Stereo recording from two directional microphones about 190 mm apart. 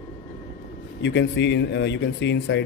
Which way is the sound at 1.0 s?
70° left (ahead or behind).